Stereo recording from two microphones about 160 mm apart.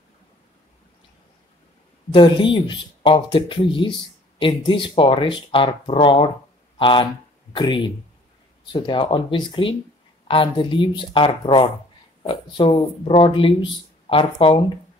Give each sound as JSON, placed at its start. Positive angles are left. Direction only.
{"t": 2.1, "sound": "speech", "side_deg": 30}